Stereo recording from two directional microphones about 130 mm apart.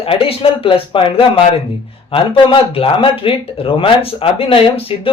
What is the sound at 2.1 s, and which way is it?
Speech, 45° left (ahead or behind).